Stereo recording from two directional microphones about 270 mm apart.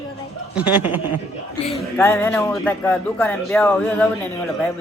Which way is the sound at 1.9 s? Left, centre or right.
Centre.